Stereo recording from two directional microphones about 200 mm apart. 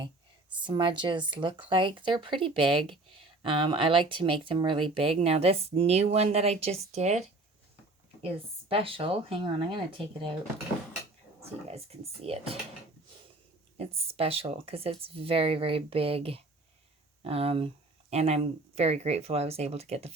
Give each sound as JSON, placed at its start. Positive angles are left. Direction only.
{"t": 0.6, "sound": "speech", "side_deg": -25}
{"t": 8.7, "sound": "speech", "side_deg": -25}
{"t": 11.7, "sound": "speech", "side_deg": -30}
{"t": 13.7, "sound": "speech", "side_deg": -30}